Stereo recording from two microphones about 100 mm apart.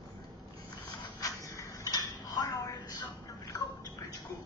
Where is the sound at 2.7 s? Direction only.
35° left (ahead or behind).